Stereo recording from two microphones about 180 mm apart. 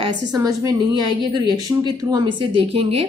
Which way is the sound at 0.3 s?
20° right (ahead or behind).